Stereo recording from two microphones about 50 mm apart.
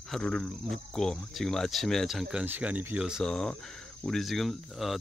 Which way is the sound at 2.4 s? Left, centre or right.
Right.